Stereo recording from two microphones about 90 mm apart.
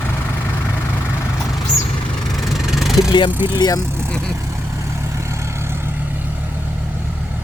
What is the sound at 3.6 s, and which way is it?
Speech, 45° left (ahead or behind).